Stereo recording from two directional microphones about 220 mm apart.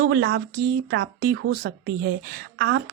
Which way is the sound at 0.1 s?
50° right (ahead or behind).